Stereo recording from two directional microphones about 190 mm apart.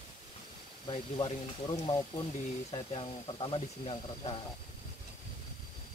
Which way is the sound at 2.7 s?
25° left (ahead or behind).